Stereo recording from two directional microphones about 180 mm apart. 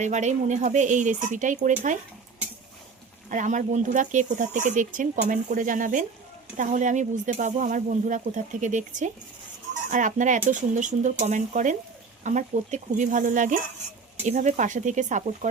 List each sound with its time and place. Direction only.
0.0 s speech: 40° right (ahead or behind)
3.2 s speech: 45° right (ahead or behind)